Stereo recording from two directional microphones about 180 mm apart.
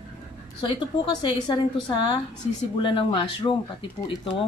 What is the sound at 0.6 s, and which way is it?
Speech, 25° left (ahead or behind).